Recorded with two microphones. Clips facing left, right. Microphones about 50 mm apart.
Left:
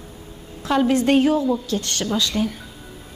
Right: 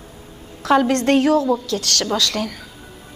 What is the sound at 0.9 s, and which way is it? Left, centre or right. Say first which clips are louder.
A woman's voice: right 1 dB; right.